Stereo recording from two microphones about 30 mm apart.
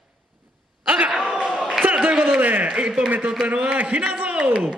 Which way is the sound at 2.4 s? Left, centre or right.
Right.